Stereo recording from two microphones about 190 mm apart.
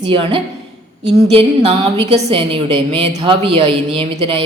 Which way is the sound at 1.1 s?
30° right (ahead or behind).